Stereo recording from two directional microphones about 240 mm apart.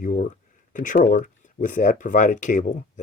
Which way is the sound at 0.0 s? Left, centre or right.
Left.